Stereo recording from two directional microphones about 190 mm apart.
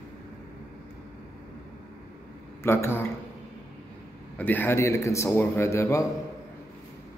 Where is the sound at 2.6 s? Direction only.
10° left (ahead or behind).